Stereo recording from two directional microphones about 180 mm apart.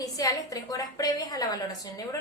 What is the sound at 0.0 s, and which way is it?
A woman's voice, 20° left (ahead or behind).